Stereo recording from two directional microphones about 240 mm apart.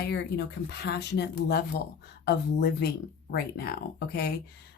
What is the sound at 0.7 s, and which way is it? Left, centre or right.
Speech, left.